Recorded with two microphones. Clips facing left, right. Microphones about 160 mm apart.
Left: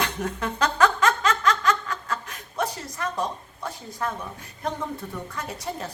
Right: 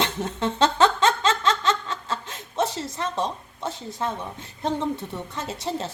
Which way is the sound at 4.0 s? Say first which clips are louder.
Even; 25° right (ahead or behind).